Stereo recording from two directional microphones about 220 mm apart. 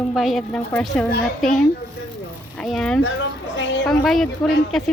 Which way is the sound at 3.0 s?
60° left (ahead or behind).